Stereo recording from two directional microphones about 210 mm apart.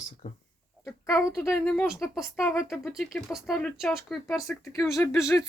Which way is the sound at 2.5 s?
15° left (ahead or behind).